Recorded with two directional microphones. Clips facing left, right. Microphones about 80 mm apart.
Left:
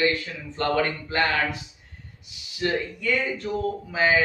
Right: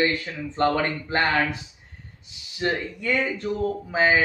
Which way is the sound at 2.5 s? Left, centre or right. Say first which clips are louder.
Even; right.